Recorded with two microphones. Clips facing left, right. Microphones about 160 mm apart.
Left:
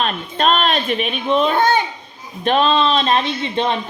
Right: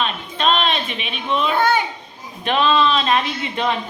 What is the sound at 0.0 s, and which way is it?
A woman's voice, 45° left (ahead or behind).